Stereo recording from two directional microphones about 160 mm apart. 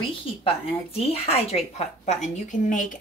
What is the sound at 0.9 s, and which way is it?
A woman's voice, 40° left (ahead or behind).